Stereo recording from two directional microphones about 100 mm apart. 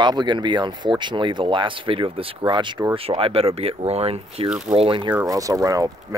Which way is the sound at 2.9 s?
65° right (ahead or behind).